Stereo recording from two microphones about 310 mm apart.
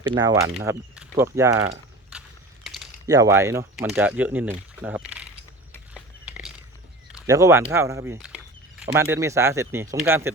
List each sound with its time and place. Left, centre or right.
0.0 s speech: centre
3.1 s speech: centre
5.7 s a sound: centre
7.3 s speech: centre